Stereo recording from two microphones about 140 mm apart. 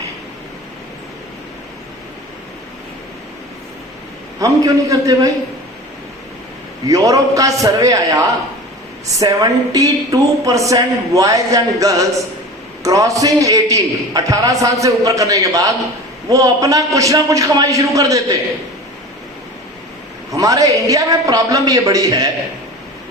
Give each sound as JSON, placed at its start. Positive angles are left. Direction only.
{"t": 4.4, "sound": "a woman's voice", "side_deg": -25}
{"t": 6.8, "sound": "a woman's voice", "side_deg": -25}
{"t": 20.3, "sound": "a woman's voice", "side_deg": -25}